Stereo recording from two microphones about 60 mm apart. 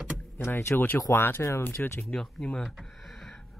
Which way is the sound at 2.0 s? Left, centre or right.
Centre.